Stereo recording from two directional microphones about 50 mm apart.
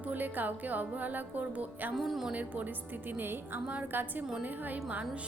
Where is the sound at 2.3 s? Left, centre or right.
Right.